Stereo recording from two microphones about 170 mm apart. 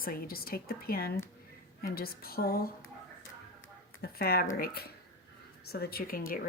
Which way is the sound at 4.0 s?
65° left (ahead or behind).